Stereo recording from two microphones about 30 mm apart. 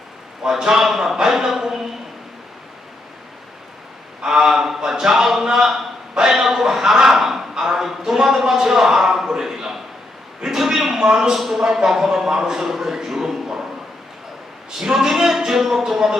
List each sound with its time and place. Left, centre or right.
0.4 s speech: centre
4.4 s a man's voice: centre
14.9 s speech: centre